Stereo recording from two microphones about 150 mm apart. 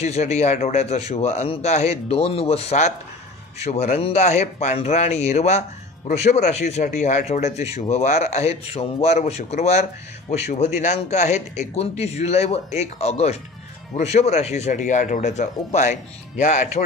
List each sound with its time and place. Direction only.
0.0 s a man's voice: 50° left (ahead or behind)